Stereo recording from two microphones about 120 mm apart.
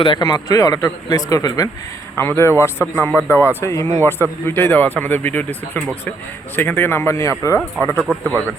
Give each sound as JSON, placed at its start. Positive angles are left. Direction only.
{"t": 0.2, "sound": "speech", "side_deg": 30}
{"t": 2.1, "sound": "speech", "side_deg": 20}
{"t": 2.6, "sound": "speech", "side_deg": -15}
{"t": 3.2, "sound": "speech", "side_deg": 20}
{"t": 8.0, "sound": "speech", "side_deg": -15}